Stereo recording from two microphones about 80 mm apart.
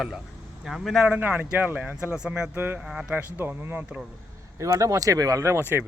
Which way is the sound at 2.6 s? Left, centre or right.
Right.